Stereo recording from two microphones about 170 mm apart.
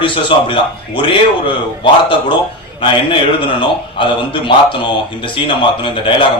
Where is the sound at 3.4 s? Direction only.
30° left (ahead or behind).